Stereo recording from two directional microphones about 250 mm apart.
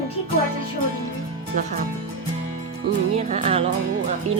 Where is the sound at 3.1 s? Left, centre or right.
Right.